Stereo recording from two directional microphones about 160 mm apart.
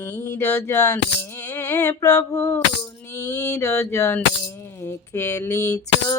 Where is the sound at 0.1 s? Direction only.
20° left (ahead or behind).